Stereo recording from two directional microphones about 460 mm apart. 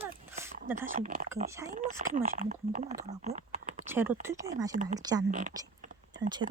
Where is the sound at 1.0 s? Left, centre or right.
Centre.